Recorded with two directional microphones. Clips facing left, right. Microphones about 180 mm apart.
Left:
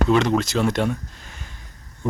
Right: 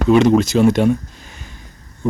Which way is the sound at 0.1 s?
10° right (ahead or behind).